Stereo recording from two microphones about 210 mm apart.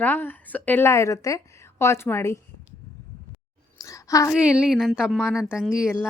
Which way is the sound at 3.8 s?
15° left (ahead or behind).